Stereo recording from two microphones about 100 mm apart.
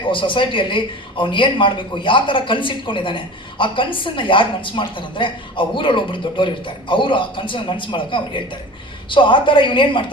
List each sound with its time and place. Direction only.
0.0 s speech: 55° left (ahead or behind)